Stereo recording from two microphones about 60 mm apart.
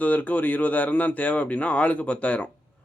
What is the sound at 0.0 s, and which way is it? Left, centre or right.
Speech, left.